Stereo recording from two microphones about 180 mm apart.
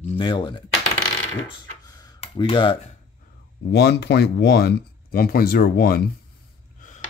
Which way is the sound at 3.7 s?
70° left (ahead or behind).